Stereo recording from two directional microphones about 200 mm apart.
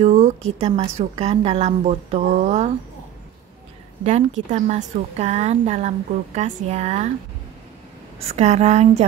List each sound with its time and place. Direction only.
0.0 s a sound: 35° right (ahead or behind)
0.6 s a woman's voice: 30° right (ahead or behind)
4.0 s a woman's voice: 35° right (ahead or behind)
8.3 s a woman's voice: 35° right (ahead or behind)